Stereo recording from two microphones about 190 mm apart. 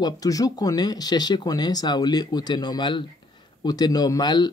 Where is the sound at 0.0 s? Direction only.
20° left (ahead or behind).